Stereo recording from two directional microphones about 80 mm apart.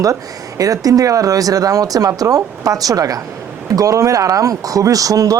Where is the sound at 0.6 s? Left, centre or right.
Right.